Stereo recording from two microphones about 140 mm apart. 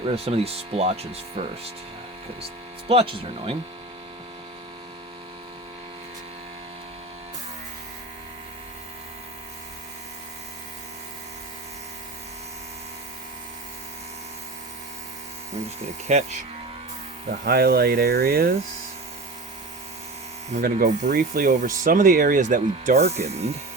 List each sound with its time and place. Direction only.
0.0 s speech: 45° right (ahead or behind)
2.4 s speech: 45° right (ahead or behind)
16.0 s speech: 55° right (ahead or behind)
17.4 s speech: 90° right
20.6 s speech: 85° right; by 23.0 s 70° right (ahead or behind)
23.0 s speech: 50° right (ahead or behind)